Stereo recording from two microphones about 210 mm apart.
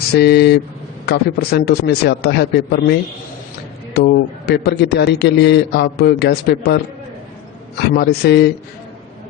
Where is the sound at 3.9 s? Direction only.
50° left (ahead or behind).